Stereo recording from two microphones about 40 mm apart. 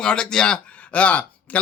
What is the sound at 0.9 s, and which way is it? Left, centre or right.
Speech, left.